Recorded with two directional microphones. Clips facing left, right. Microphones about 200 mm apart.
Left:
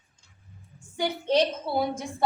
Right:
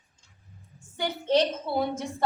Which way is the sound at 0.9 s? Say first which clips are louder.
Even; 15° left (ahead or behind).